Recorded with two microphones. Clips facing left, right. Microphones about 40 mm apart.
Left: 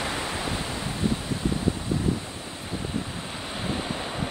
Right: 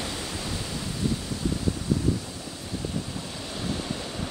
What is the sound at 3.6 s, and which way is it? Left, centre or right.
Waves, left.